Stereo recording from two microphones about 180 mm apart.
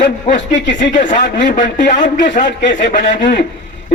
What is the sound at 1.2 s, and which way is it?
Speech, 70° left (ahead or behind).